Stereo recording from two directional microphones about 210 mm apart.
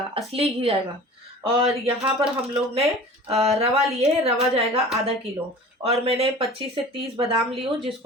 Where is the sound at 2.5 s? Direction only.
30° right (ahead or behind).